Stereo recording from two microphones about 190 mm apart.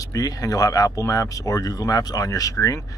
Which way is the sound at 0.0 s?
20° left (ahead or behind).